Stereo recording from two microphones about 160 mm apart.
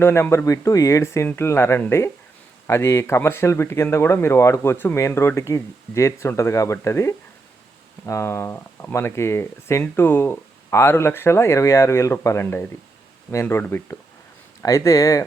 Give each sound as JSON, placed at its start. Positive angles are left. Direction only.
{"t": 0.0, "sound": "speech", "side_deg": 15}